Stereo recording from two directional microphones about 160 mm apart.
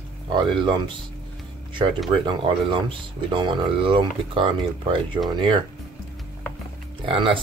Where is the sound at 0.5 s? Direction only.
30° right (ahead or behind).